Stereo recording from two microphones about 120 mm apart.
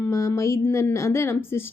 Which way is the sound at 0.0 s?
25° left (ahead or behind).